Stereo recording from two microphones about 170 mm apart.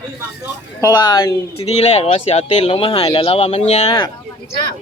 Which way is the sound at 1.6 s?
40° left (ahead or behind).